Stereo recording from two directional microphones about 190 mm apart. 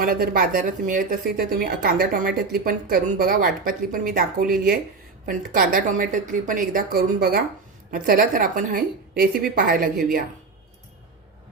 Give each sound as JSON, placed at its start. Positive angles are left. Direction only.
{"t": 0.0, "sound": "speech", "side_deg": -50}